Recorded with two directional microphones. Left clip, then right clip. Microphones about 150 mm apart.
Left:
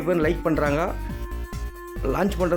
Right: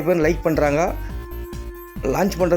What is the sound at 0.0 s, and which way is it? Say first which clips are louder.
Speech: right 4 dB; 15° right (ahead or behind).